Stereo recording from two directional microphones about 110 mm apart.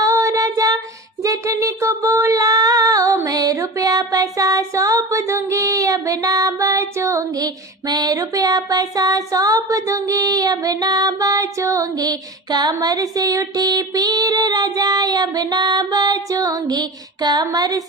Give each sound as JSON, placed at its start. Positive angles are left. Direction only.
{"t": 0.0, "sound": "female singing", "side_deg": -30}
{"t": 3.2, "sound": "music", "side_deg": -30}